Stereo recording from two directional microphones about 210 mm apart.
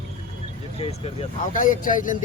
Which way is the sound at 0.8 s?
35° left (ahead or behind).